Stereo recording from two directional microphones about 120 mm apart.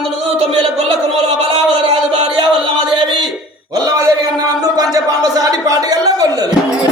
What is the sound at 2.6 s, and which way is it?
Music, 45° right (ahead or behind).